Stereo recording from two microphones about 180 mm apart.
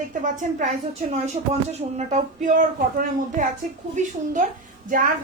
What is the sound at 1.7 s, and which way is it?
A woman's voice, 40° right (ahead or behind).